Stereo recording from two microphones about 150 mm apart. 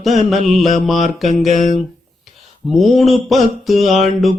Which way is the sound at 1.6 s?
55° left (ahead or behind).